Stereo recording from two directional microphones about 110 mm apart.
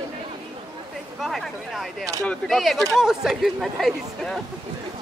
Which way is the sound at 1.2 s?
Centre (ahead or behind).